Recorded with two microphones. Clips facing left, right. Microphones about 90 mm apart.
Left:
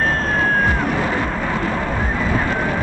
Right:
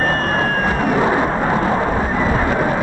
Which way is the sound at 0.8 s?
25° right (ahead or behind).